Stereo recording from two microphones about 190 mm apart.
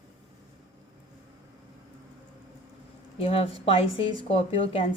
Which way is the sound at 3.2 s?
30° left (ahead or behind).